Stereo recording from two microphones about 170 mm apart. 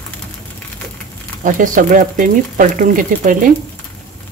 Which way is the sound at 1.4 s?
50° right (ahead or behind).